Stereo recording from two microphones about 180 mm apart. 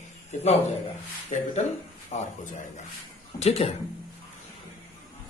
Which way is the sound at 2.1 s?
35° left (ahead or behind).